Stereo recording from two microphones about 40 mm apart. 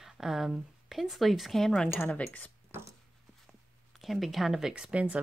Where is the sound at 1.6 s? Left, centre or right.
Centre.